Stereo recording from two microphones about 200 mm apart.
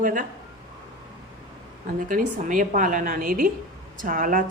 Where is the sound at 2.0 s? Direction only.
40° right (ahead or behind).